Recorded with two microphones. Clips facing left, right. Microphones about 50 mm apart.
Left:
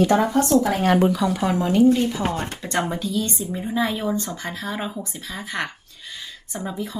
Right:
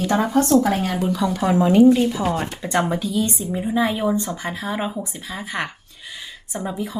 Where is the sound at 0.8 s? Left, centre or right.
Left.